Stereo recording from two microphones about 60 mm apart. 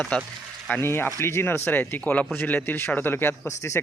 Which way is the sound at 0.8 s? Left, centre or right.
Left.